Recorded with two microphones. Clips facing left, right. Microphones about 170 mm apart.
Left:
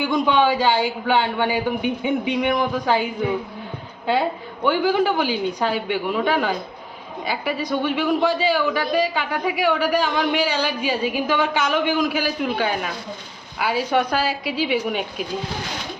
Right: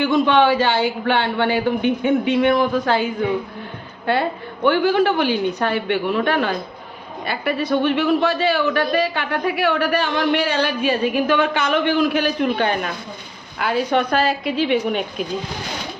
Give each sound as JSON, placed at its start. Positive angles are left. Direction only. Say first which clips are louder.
{"t": 0.3, "sound": "a man's voice", "louder": "right 2 dB", "side_deg": 15}
{"t": 4.6, "sound": "a man's voice", "louder": "right 3 dB", "side_deg": 10}
{"t": 7.6, "sound": "a man's voice", "louder": "right 5 dB", "side_deg": 10}